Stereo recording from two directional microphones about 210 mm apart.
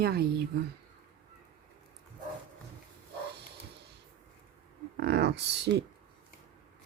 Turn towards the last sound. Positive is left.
turn(degrees=-50)  # may be behind; listen again after turning